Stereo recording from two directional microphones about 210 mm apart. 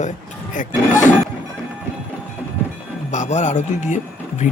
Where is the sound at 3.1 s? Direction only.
35° left (ahead or behind).